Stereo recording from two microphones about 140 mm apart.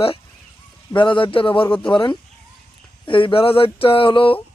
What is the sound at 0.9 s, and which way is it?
A man's voice, 35° left (ahead or behind).